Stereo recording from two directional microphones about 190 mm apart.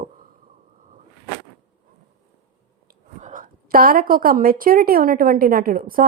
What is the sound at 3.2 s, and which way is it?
A woman's voice, 45° right (ahead or behind).